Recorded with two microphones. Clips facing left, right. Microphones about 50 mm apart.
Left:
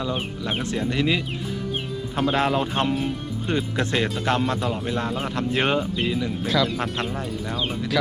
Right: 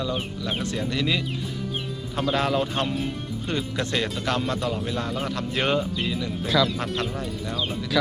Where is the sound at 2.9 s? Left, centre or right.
Centre.